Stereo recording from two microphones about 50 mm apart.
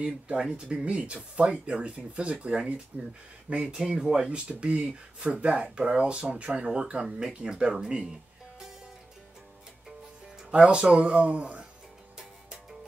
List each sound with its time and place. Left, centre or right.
0.0 s speech: centre
2.9 s speech: right
3.4 s speech: right
10.6 s speech: centre